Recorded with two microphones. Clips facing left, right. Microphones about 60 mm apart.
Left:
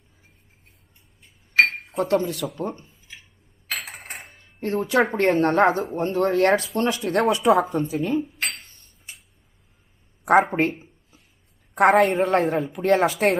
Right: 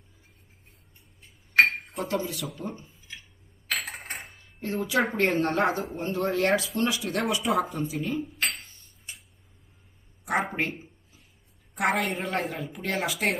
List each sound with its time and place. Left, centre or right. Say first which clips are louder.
1.6 s dishes: left 4 dB; left
2.6 s speech: left 7 dB; left
4.3 s a sound: left 8 dB; left
5.1 s speech: left 6 dB; left
8.2 s dishes: left 1 dB; centre
10.4 s speech: left 7 dB; left